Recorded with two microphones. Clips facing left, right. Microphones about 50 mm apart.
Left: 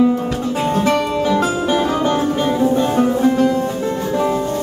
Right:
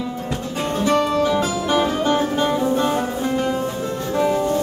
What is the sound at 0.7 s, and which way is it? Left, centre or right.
Music, left.